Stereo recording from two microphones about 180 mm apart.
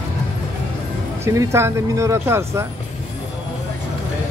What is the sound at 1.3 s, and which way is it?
Speech, 15° right (ahead or behind).